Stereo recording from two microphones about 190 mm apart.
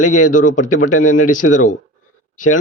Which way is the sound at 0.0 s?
40° left (ahead or behind).